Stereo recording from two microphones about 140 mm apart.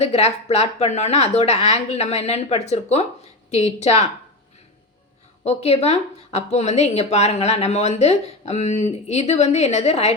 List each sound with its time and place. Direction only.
0.0 s speech: 50° left (ahead or behind)
5.5 s speech: 50° left (ahead or behind)